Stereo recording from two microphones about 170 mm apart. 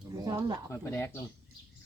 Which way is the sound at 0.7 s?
15° left (ahead or behind).